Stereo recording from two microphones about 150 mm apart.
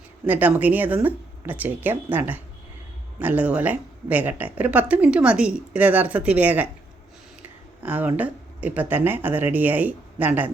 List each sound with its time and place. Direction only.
0.3 s a woman's voice: 10° right (ahead or behind)
7.8 s a woman's voice: 10° right (ahead or behind)